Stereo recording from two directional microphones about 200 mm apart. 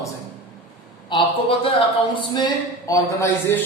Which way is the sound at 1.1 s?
25° left (ahead or behind).